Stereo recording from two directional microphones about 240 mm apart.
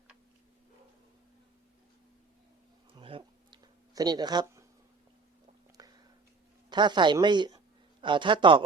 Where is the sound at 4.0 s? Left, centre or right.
Centre.